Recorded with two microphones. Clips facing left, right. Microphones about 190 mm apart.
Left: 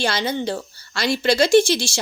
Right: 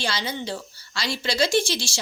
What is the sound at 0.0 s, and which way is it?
A woman's voice, 55° left (ahead or behind).